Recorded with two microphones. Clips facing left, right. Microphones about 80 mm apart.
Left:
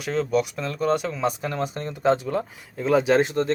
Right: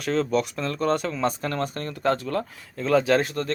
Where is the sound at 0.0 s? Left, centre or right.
Centre.